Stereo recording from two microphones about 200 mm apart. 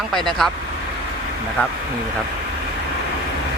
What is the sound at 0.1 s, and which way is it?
Speech, centre (ahead or behind).